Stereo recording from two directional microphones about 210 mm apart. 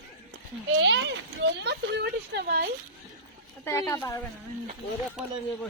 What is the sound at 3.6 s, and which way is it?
Speech, 15° left (ahead or behind).